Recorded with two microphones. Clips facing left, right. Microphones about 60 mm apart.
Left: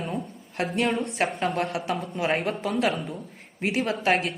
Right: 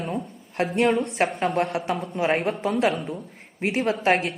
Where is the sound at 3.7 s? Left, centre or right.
Right.